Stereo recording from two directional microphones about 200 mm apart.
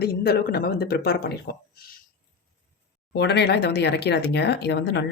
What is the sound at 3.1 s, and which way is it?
Speech, 55° left (ahead or behind).